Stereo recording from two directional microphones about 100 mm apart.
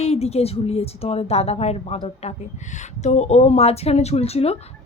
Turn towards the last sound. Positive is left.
turn(degrees=90)